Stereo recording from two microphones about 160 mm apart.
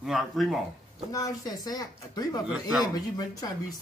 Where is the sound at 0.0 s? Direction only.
Centre (ahead or behind).